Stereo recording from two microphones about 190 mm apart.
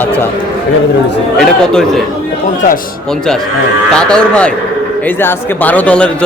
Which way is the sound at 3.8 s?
5° left (ahead or behind).